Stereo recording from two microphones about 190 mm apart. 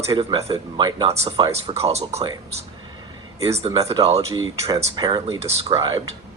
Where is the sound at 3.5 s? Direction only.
35° right (ahead or behind).